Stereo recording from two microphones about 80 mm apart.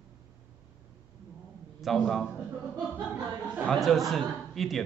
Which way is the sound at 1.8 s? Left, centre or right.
Centre.